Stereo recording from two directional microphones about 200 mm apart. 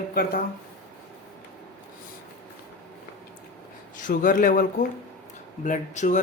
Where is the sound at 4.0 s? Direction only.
40° left (ahead or behind).